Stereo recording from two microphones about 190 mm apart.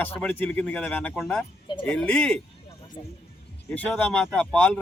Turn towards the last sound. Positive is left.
turn(degrees=5)  # may be behind; listen again after turning